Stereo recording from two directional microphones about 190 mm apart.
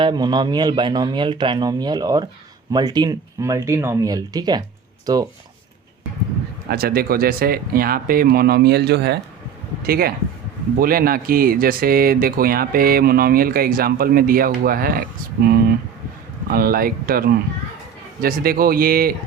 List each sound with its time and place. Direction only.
0.0 s speech: 20° right (ahead or behind)
6.7 s speech: 55° right (ahead or behind)